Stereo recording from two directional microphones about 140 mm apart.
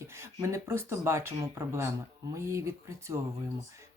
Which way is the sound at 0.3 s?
20° right (ahead or behind).